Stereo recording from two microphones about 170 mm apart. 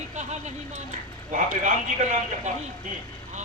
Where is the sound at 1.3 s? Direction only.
50° right (ahead or behind).